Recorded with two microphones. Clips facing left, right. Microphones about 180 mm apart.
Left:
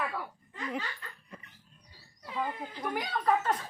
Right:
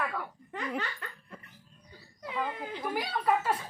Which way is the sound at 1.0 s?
70° right (ahead or behind).